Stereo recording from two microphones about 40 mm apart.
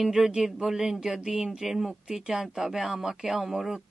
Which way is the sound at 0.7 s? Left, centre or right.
Centre.